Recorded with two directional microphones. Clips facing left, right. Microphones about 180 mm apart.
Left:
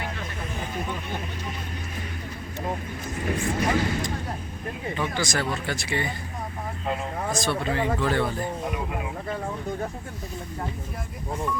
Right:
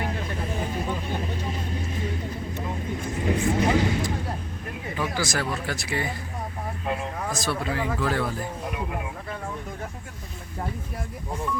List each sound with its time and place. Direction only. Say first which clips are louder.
3.2 s speech: right 3 dB; 20° right (ahead or behind)
4.9 s speech: right 1 dB; 5° right (ahead or behind)
7.3 s speech: left 2 dB; centre (ahead or behind)